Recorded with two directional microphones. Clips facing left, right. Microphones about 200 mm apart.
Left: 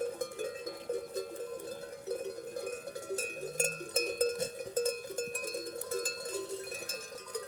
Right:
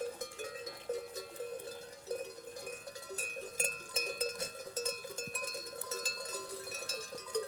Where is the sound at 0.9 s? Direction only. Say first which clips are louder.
Left 5 dB; 55° left (ahead or behind).